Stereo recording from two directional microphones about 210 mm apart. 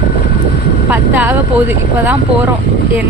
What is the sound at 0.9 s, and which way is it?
Speech, 10° right (ahead or behind).